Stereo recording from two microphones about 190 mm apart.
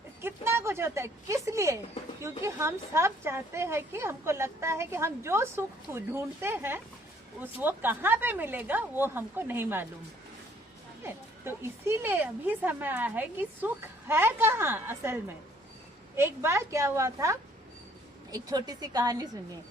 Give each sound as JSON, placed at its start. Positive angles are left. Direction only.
{"t": 0.2, "sound": "a woman's voice", "side_deg": -10}
{"t": 11.0, "sound": "a woman's voice", "side_deg": -15}